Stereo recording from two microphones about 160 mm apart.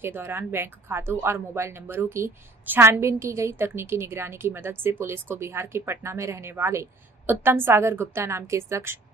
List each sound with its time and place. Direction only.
0.0 s a woman's voice: 15° right (ahead or behind)